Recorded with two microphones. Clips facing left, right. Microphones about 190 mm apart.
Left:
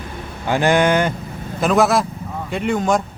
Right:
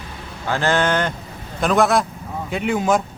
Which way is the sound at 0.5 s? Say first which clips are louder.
Left 4 dB; 15° left (ahead or behind).